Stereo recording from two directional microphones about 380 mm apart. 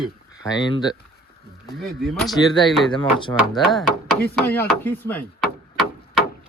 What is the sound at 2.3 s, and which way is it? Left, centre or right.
Speech, centre.